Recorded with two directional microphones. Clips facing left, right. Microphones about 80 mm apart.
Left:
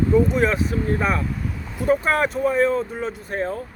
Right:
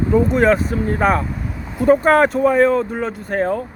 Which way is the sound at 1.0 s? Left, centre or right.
Right.